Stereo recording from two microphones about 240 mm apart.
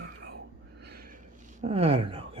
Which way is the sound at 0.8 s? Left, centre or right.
Right.